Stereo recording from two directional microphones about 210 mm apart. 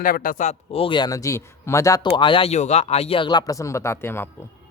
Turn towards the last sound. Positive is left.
turn(degrees=10)  # may be behind; listen again after turning